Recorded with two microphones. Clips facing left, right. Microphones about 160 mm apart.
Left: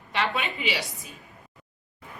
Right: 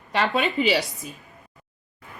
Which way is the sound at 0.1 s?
40° right (ahead or behind).